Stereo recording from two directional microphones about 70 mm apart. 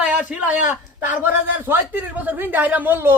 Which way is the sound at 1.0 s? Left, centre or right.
Right.